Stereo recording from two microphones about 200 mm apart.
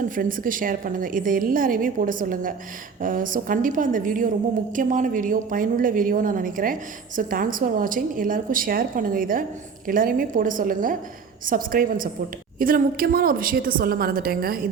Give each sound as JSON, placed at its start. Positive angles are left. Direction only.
{"t": 0.2, "sound": "a woman's voice", "side_deg": -45}